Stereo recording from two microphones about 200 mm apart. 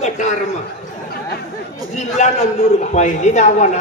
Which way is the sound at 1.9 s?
35° left (ahead or behind).